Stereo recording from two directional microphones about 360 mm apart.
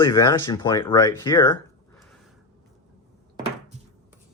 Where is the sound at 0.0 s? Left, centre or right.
Centre.